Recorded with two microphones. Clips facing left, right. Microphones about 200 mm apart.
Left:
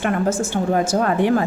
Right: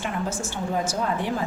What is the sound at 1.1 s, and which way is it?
Speech, 70° left (ahead or behind).